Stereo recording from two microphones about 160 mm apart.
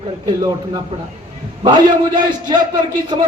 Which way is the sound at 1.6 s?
25° right (ahead or behind).